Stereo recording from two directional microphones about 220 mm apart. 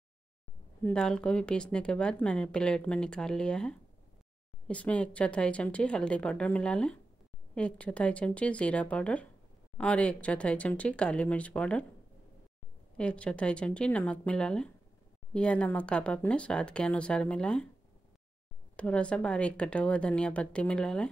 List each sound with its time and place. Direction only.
0.8 s a woman's voice: 5° left (ahead or behind)
12.9 s a woman's voice: 5° left (ahead or behind)
18.8 s a woman's voice: 5° left (ahead or behind)